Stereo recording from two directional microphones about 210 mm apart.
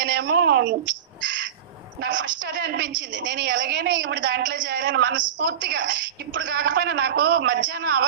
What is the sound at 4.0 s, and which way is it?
Speech, 60° right (ahead or behind).